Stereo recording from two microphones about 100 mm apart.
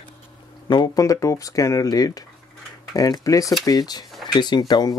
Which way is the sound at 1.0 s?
35° left (ahead or behind).